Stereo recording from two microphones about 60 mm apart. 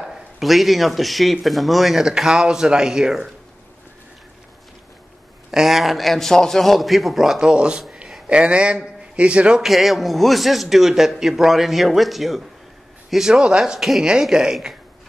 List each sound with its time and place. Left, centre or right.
0.0 s speech: centre
5.5 s a man's voice: centre
9.6 s speech: centre